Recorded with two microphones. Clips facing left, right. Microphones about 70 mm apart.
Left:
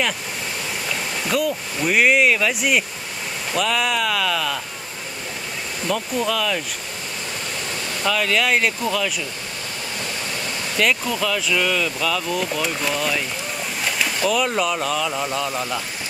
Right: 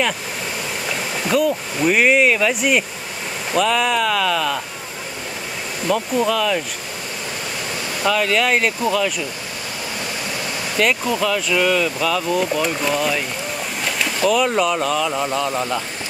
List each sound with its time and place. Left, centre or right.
0.8 s speech: centre
5.8 s speech: centre
8.0 s speech: centre
10.8 s speech: centre